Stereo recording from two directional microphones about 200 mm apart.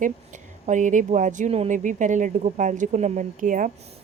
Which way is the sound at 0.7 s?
40° right (ahead or behind).